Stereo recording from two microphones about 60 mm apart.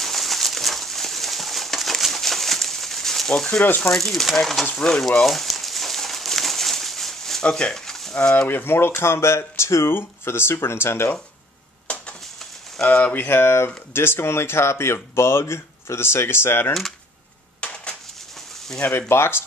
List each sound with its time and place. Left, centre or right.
0.0 s a sound: centre
3.8 s speech: centre
5.2 s a sound: centre
7.4 s speech: centre
7.7 s speech: centre
8.5 s speech: left
9.9 s speech: left
11.9 s a sound: left
12.8 s speech: left
13.3 s speech: left
17.6 s dishes: left
18.8 s speech: left